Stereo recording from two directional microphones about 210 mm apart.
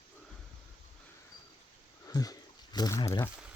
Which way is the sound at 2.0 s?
15° left (ahead or behind).